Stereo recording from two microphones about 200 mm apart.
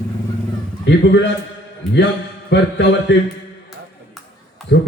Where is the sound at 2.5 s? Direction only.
60° left (ahead or behind).